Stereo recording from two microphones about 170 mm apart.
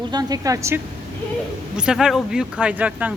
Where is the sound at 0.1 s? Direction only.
20° right (ahead or behind).